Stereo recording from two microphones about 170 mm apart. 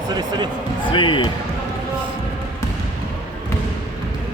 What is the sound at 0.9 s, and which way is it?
Basketball bounce, 30° left (ahead or behind).